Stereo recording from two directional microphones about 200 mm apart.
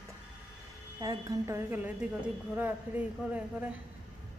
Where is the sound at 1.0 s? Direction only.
20° right (ahead or behind).